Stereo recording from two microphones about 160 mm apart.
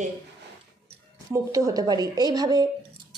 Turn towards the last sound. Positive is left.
turn(degrees=-25)  # may be behind; listen again after turning